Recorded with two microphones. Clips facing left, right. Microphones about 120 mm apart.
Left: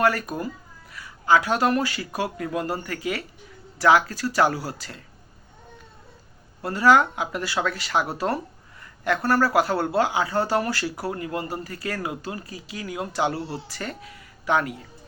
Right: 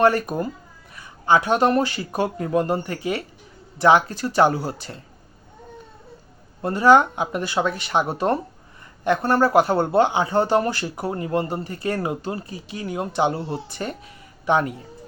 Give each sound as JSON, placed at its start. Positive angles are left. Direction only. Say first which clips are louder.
{"t": 0.0, "sound": "speech", "louder": "right 4 dB", "side_deg": -25}
{"t": 6.6, "sound": "speech", "louder": "right 3 dB", "side_deg": -25}